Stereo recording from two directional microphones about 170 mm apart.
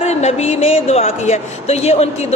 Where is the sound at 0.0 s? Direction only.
40° left (ahead or behind).